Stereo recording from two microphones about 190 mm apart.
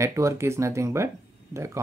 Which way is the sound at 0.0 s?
15° right (ahead or behind).